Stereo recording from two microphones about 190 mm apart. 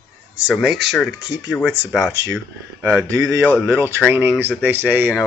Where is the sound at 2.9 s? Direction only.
15° right (ahead or behind).